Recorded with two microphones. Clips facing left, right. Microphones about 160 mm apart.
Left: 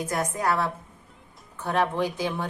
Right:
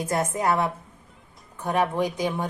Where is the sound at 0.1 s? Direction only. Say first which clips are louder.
Right 3 dB; 25° right (ahead or behind).